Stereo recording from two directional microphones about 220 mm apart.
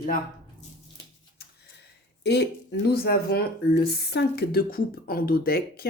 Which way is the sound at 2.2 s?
50° left (ahead or behind).